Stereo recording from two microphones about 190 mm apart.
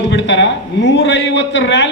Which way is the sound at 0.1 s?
65° left (ahead or behind).